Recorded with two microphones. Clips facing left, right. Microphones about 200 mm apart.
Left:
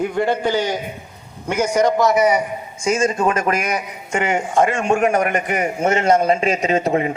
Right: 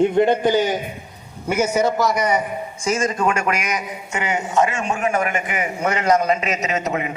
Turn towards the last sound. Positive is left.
turn(degrees=35)  # may be behind; listen again after turning